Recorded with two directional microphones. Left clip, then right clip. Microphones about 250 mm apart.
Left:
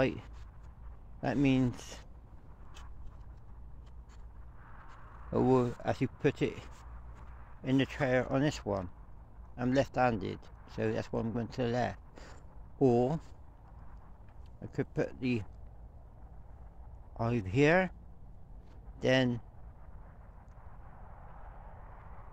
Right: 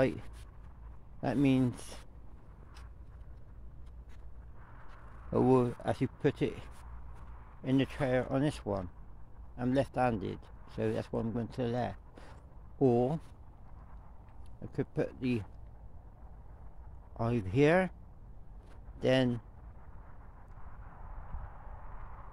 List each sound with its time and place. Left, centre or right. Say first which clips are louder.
1.2 s speech: even; centre
5.3 s speech: right 1 dB; centre
14.6 s speech: even; centre
17.2 s speech: even; centre
18.9 s speech: even; centre
21.8 s vehicle: right 2 dB; right